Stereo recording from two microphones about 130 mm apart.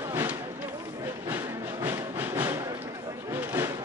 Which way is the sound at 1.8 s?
15° right (ahead or behind).